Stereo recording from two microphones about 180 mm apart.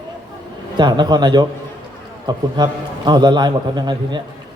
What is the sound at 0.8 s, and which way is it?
A man's voice, 25° right (ahead or behind).